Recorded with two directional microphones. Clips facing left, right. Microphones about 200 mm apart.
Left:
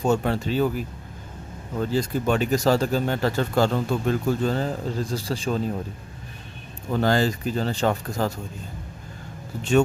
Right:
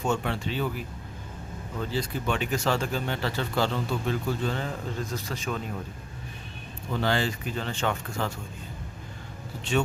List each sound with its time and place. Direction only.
0.0 s speech: 40° left (ahead or behind)
6.9 s speech: 45° left (ahead or behind)